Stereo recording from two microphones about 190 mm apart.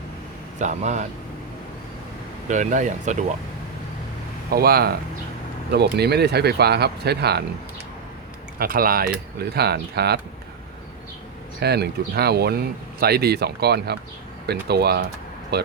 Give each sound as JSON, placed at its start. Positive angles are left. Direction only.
{"t": 0.6, "sound": "speech", "side_deg": -40}
{"t": 2.5, "sound": "speech", "side_deg": -40}
{"t": 4.5, "sound": "speech", "side_deg": -55}
{"t": 8.5, "sound": "speech", "side_deg": -50}
{"t": 11.6, "sound": "speech", "side_deg": -60}